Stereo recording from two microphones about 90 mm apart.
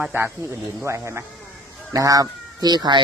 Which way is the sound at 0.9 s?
30° right (ahead or behind).